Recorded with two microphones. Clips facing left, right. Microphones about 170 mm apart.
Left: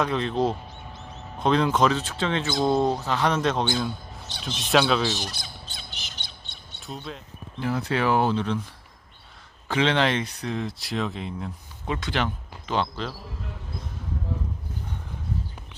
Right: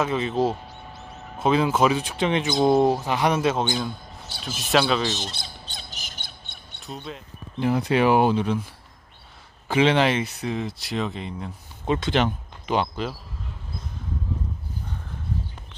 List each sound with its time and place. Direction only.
0.0 s speech: 5° right (ahead or behind)
5.0 s squawk: 20° right (ahead or behind); by 6.6 s 50° right (ahead or behind)
6.7 s speech: centre (ahead or behind)
7.6 s speech: 15° right (ahead or behind)
9.6 s speech: 10° right (ahead or behind)
11.9 s speech: 25° right (ahead or behind)